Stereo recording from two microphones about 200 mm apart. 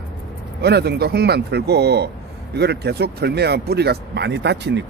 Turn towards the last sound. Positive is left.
turn(degrees=-60)  # may be behind; listen again after turning